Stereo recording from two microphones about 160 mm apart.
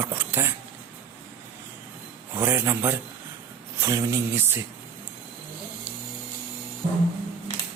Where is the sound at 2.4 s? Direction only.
15° right (ahead or behind).